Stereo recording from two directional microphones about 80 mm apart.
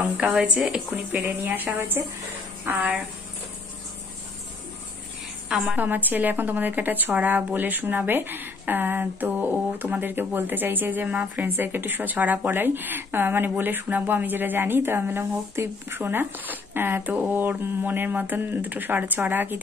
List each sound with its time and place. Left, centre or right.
0.7 s a woman's voice: centre
5.8 s a woman's voice: right